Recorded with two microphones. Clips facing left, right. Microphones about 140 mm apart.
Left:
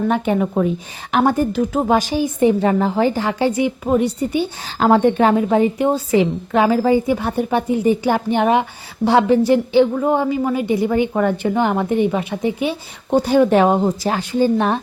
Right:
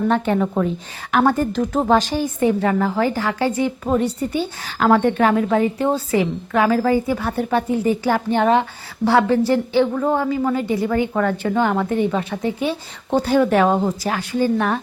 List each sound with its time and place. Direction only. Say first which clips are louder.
0.1 s a woman's voice: left 1 dB; 10° left (ahead or behind)